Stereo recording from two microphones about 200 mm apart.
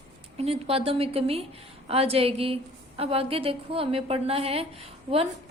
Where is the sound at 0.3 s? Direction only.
30° right (ahead or behind).